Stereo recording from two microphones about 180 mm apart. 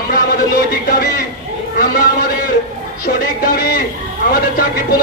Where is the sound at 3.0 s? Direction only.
55° left (ahead or behind).